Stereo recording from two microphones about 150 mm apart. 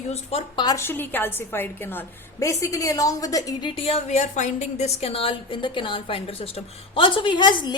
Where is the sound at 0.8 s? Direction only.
15° left (ahead or behind).